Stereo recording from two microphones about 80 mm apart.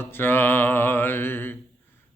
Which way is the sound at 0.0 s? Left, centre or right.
Left.